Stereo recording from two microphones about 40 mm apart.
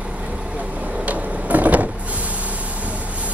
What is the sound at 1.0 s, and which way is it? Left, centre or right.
Vehicle, right.